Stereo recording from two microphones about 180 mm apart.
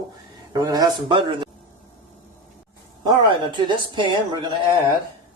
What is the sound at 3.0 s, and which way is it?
A man's voice, 25° right (ahead or behind).